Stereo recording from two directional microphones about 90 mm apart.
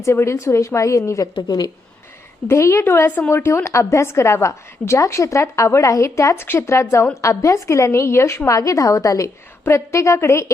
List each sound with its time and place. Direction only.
0.0 s a woman's voice: 30° left (ahead or behind)
2.5 s a woman's voice: 30° left (ahead or behind)